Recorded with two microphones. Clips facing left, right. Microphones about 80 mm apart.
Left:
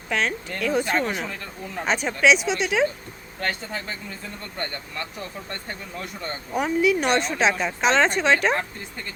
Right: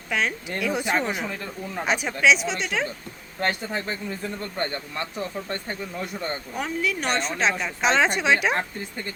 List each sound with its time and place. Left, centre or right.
0.1 s speech: centre
3.4 s speech: right
6.5 s speech: centre